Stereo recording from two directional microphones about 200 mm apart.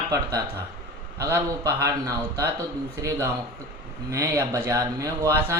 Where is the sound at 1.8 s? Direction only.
15° right (ahead or behind).